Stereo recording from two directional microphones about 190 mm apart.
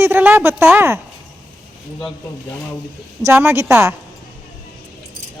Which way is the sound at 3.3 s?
15° right (ahead or behind).